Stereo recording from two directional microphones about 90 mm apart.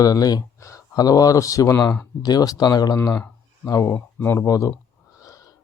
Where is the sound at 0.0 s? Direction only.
40° left (ahead or behind).